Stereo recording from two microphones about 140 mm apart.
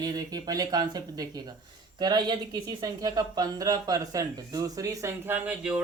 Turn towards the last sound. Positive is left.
turn(degrees=-10)  # may be behind; listen again after turning